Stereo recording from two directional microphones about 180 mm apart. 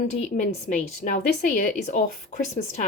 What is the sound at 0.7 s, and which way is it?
Speech, 45° left (ahead or behind).